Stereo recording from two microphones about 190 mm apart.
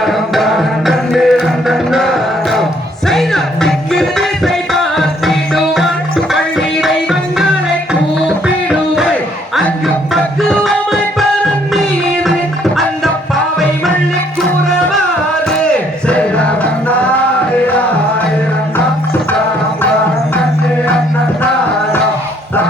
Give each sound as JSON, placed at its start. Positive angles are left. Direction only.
{"t": 0.0, "sound": "music", "side_deg": 0}
{"t": 10.5, "sound": "music", "side_deg": 0}
{"t": 15.6, "sound": "music", "side_deg": 5}